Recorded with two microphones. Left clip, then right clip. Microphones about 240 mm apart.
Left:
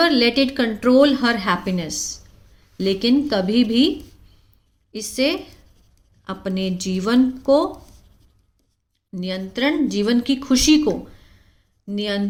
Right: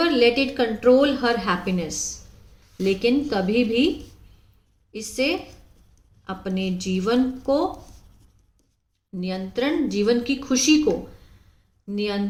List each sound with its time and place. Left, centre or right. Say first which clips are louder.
0.0 s a woman's voice: left 2 dB; left
9.1 s a woman's voice: left 1 dB; left
11.9 s a woman's voice: left 2 dB; left